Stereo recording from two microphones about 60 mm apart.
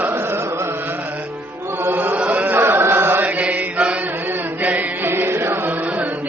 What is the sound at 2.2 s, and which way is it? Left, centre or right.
Carnatic music, right.